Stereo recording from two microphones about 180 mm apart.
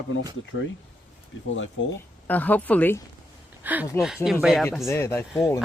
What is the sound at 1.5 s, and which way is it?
Speech, 90° left.